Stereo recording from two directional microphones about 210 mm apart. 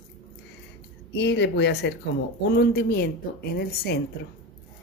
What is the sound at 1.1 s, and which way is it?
Speech, 55° left (ahead or behind).